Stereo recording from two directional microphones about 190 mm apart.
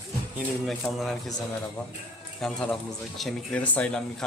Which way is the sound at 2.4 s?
5° left (ahead or behind).